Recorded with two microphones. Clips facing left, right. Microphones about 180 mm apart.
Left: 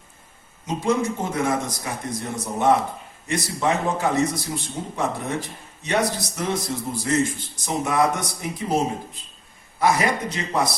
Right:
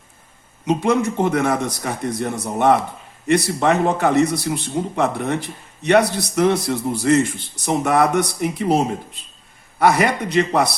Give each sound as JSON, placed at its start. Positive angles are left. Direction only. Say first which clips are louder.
{"t": 0.6, "sound": "a man's voice", "louder": "right 5 dB", "side_deg": -65}